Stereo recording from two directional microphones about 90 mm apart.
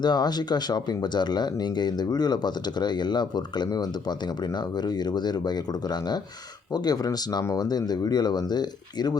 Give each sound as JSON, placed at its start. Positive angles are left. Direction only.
{"t": 0.0, "sound": "speech", "side_deg": 50}
{"t": 5.1, "sound": "speech", "side_deg": 50}